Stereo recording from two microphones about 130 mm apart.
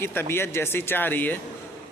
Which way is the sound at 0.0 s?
20° left (ahead or behind).